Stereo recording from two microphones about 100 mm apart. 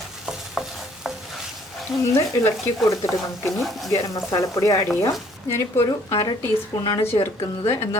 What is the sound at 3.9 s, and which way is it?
A woman's voice, 30° left (ahead or behind).